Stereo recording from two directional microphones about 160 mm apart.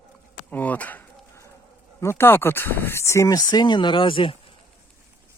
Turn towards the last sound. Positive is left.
turn(degrees=30)  # may be behind; listen again after turning